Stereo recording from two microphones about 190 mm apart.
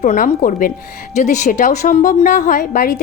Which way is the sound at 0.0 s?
45° left (ahead or behind).